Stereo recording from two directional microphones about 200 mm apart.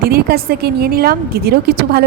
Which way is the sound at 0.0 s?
50° right (ahead or behind).